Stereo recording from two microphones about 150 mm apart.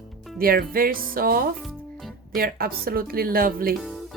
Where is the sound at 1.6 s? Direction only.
Centre (ahead or behind).